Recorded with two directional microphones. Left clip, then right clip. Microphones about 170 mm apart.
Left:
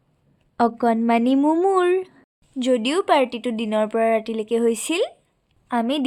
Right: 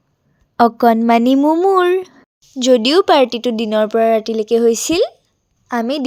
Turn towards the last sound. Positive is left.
turn(degrees=-25)  # may be behind; listen again after turning